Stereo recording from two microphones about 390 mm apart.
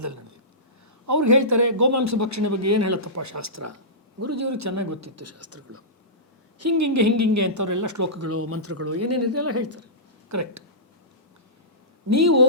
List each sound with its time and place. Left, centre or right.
1.0 s a man's voice: right
12.0 s speech: right